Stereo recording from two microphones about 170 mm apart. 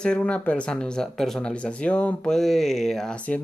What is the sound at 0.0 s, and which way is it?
Speech, 5° left (ahead or behind).